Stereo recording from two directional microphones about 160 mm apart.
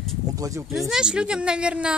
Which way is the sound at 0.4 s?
20° right (ahead or behind).